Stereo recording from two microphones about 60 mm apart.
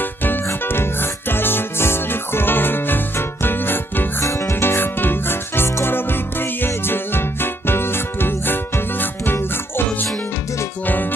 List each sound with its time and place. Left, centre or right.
0.0 s music: left
4.2 s music: left